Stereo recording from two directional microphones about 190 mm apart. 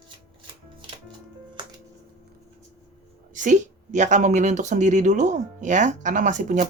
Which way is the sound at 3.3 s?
40° right (ahead or behind).